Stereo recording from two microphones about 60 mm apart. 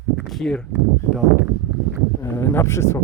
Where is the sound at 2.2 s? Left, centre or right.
Left.